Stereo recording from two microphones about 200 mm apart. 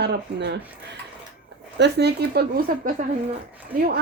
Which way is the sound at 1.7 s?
55° right (ahead or behind).